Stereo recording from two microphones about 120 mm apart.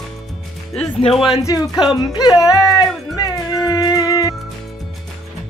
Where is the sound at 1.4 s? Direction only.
30° left (ahead or behind).